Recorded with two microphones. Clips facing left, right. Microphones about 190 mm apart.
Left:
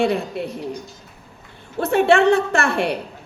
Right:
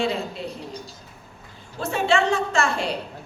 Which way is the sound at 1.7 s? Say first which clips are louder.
Left 6 dB; 60° left (ahead or behind).